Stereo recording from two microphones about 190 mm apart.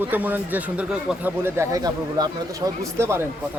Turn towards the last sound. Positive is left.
turn(degrees=-15)  # may be behind; listen again after turning